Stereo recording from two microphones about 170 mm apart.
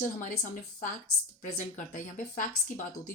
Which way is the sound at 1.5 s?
55° left (ahead or behind).